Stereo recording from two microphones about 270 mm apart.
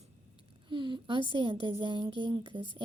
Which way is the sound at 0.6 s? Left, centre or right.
Centre.